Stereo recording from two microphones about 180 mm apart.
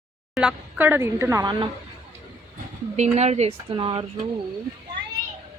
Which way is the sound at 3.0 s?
40° right (ahead or behind).